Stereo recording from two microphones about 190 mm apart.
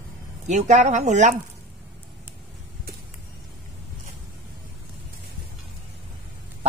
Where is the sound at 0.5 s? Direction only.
40° right (ahead or behind).